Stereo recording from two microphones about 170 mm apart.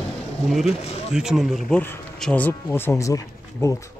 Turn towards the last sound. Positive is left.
turn(degrees=20)  # may be behind; listen again after turning